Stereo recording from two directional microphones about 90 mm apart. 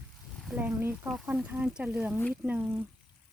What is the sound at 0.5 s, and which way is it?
Speech, 20° right (ahead or behind).